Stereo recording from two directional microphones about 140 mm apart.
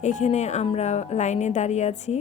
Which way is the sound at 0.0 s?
55° left (ahead or behind).